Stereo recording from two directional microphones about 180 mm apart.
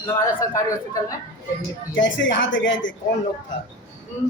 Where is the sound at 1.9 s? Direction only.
90° left.